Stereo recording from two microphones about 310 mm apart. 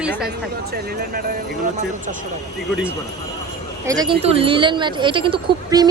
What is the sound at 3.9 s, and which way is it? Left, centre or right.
A woman's voice, centre.